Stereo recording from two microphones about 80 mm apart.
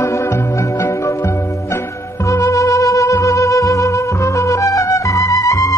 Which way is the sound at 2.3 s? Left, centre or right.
Left.